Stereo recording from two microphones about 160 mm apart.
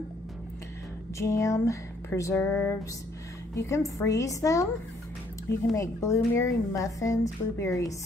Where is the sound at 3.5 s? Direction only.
20° left (ahead or behind).